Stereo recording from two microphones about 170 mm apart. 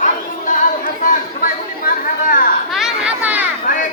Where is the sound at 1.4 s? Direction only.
55° left (ahead or behind).